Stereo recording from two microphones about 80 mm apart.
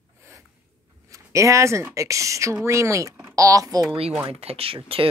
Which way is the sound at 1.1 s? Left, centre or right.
Right.